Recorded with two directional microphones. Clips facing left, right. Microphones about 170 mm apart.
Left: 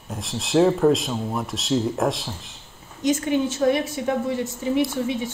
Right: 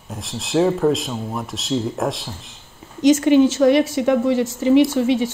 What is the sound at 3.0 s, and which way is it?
A woman's voice, 90° right.